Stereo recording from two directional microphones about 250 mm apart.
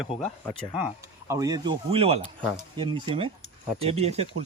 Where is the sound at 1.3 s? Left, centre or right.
Centre.